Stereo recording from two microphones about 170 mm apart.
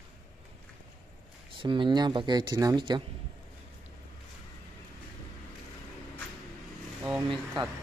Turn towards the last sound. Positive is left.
turn(degrees=-25)  # may be behind; listen again after turning